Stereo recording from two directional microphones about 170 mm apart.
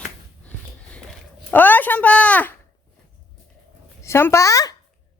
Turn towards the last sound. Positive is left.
turn(degrees=20)  # may be behind; listen again after turning